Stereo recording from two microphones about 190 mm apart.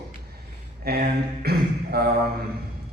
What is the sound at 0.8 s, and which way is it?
A man's voice, 55° right (ahead or behind).